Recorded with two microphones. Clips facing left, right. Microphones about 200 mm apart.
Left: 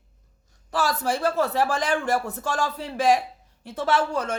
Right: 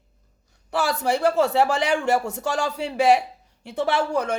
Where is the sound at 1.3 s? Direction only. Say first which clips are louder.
Right 4 dB; 80° right.